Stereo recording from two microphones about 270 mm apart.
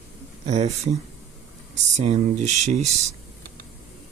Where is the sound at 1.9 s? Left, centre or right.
Right.